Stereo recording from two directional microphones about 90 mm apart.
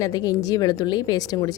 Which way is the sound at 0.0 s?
45° left (ahead or behind).